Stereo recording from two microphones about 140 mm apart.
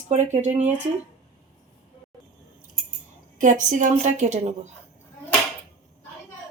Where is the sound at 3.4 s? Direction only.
65° right (ahead or behind).